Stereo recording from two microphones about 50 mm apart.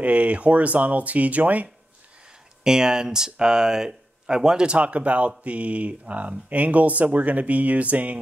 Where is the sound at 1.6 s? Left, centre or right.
Centre.